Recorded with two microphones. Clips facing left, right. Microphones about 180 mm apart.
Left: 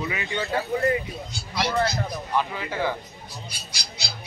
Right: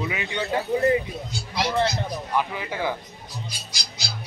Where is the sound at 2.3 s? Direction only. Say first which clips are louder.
Even; 10° right (ahead or behind).